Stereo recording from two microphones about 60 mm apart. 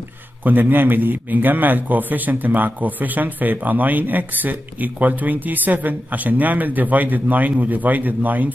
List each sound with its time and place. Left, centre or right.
0.4 s a man's voice: right